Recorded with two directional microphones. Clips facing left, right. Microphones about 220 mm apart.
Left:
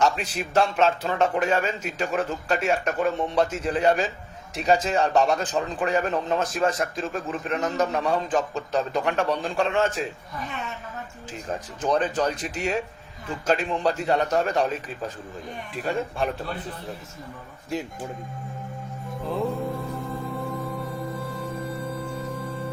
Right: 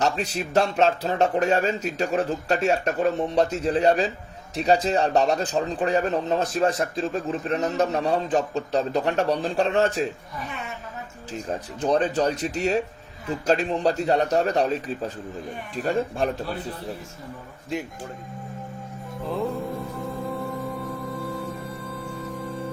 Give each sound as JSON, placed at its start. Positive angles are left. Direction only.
{"t": 0.0, "sound": "speech", "side_deg": -35}
{"t": 11.3, "sound": "speech", "side_deg": -40}
{"t": 19.2, "sound": "music", "side_deg": 0}